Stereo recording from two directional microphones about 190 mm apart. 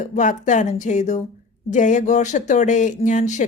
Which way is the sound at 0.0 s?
40° left (ahead or behind).